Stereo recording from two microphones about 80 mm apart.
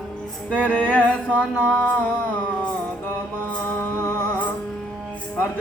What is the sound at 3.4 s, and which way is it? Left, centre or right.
Music, left.